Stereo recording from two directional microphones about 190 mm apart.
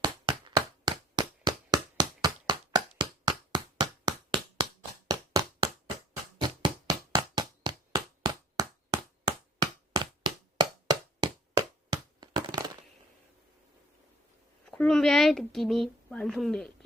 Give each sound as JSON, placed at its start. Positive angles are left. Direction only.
{"t": 0.0, "sound": "a sound", "side_deg": -25}
{"t": 6.5, "sound": "knock", "side_deg": -20}
{"t": 14.7, "sound": "a woman's voice", "side_deg": 5}